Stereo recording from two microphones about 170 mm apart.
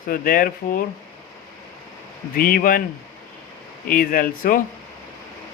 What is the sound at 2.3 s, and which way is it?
Speech, 60° left (ahead or behind).